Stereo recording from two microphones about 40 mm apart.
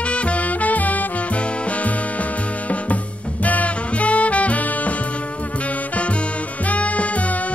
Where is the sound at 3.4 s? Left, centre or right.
Left.